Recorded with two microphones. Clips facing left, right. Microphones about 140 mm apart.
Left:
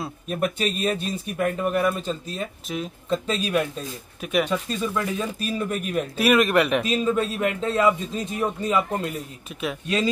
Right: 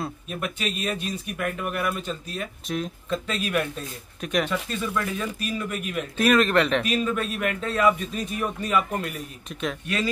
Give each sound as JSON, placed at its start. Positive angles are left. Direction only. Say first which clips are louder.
{"t": 0.3, "sound": "speech", "louder": "left 8 dB", "side_deg": 40}
{"t": 2.7, "sound": "speech", "louder": "right 2 dB", "side_deg": 5}
{"t": 3.1, "sound": "speech", "louder": "left 4 dB", "side_deg": 30}
{"t": 4.2, "sound": "speech", "louder": "left 2 dB", "side_deg": 5}
{"t": 4.5, "sound": "speech", "louder": "left 2 dB", "side_deg": 20}
{"t": 6.1, "sound": "speech", "louder": "left 1 dB", "side_deg": 10}
{"t": 6.8, "sound": "speech", "louder": "left 3 dB", "side_deg": 25}
{"t": 9.5, "sound": "speech", "louder": "even", "side_deg": 5}